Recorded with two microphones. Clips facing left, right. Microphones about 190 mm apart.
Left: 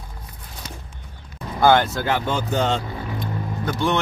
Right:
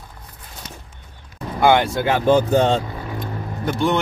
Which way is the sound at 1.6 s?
15° right (ahead or behind).